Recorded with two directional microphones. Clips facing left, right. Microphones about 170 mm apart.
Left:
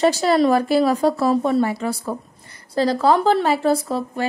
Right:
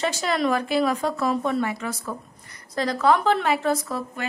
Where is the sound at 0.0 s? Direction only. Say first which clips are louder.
Left 8 dB; 35° left (ahead or behind).